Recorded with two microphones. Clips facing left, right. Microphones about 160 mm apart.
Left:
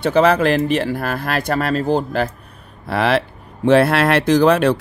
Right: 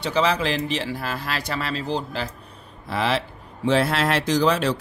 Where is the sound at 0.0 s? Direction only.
55° left (ahead or behind).